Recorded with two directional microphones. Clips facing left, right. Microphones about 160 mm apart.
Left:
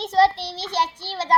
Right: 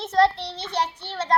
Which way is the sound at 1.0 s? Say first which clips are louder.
Left 1 dB; 30° left (ahead or behind).